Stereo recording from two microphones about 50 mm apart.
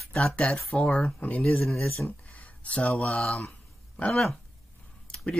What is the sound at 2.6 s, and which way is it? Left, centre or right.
Speech, left.